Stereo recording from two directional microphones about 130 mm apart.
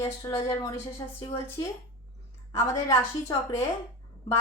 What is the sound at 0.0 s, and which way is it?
Speech, 25° left (ahead or behind).